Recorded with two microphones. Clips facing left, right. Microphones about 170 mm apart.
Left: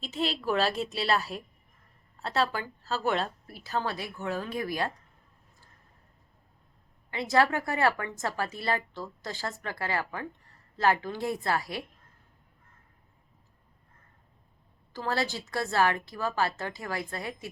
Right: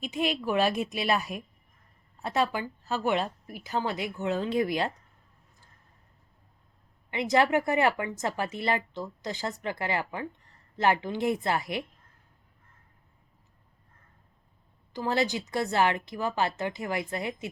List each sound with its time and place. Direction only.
0.0 s speech: 15° right (ahead or behind)
7.1 s a woman's voice: 20° right (ahead or behind)
14.9 s a woman's voice: 20° right (ahead or behind)